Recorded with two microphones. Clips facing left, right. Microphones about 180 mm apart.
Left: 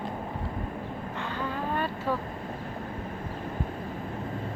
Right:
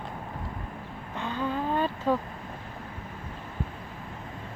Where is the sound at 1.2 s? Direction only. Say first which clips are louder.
Right 4 dB; 15° right (ahead or behind).